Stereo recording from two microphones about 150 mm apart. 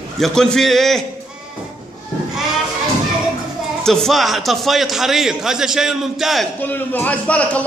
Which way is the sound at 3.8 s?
5° left (ahead or behind).